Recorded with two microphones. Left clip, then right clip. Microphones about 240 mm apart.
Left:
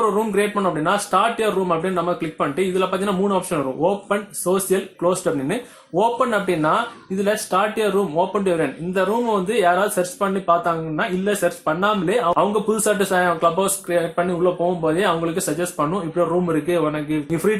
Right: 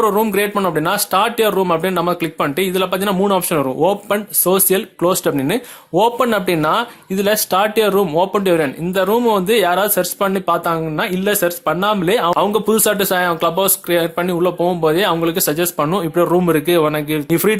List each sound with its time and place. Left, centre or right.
0.0 s speech: right